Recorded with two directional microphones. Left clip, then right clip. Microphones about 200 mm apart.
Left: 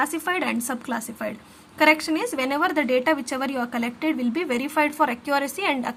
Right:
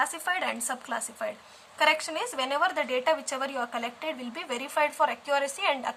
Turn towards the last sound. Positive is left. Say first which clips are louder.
# left 3 dB
turn(degrees=15)  # may be behind; listen again after turning